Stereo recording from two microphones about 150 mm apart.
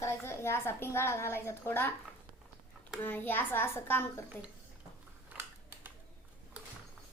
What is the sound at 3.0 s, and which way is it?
A woman's voice, 15° left (ahead or behind).